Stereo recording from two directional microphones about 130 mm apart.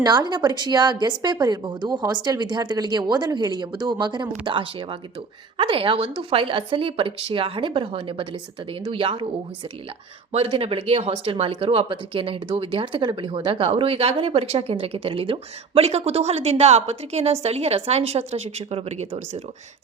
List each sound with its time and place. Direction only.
0.0 s a woman's voice: 35° right (ahead or behind)
10.3 s a woman's voice: 50° right (ahead or behind)